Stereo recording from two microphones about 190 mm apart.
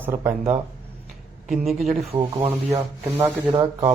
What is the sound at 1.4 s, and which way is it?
Speech, centre (ahead or behind).